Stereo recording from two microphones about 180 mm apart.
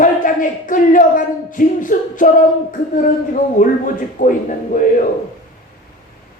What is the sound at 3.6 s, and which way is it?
Speech, 50° left (ahead or behind).